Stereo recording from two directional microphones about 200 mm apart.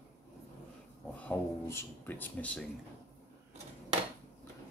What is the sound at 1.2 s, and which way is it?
Speech, 10° left (ahead or behind).